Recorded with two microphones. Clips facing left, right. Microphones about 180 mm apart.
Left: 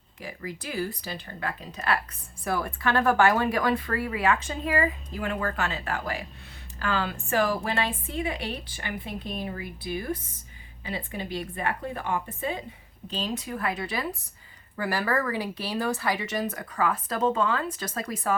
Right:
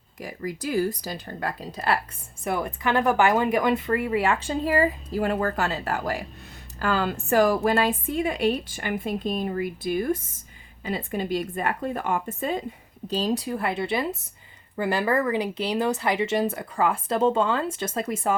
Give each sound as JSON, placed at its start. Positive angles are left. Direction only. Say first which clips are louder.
{"t": 0.2, "sound": "speech", "louder": "right 5 dB", "side_deg": -40}
{"t": 2.4, "sound": "a woman's voice", "louder": "right 2 dB", "side_deg": -20}